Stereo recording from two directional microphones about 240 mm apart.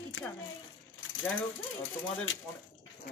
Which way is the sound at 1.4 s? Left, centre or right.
Left.